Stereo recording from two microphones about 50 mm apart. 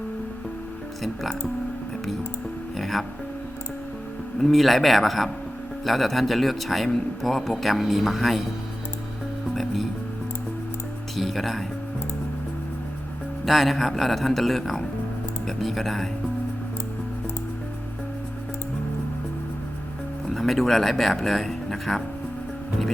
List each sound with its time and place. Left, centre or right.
1.0 s a man's voice: centre
2.7 s music: centre
4.4 s a man's voice: centre
11.2 s a man's voice: centre
13.4 s a man's voice: centre
20.3 s speech: centre